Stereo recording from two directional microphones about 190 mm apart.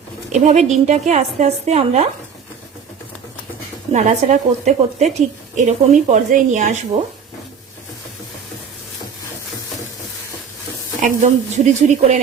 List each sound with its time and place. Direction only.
0.3 s a woman's voice: 40° right (ahead or behind)
3.9 s a woman's voice: 40° right (ahead or behind)
11.0 s a woman's voice: 35° right (ahead or behind)